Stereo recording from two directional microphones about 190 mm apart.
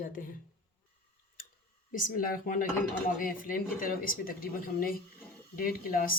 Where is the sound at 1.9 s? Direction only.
45° left (ahead or behind).